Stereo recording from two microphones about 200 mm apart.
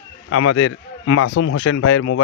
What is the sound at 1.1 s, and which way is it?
Speech, 75° left (ahead or behind).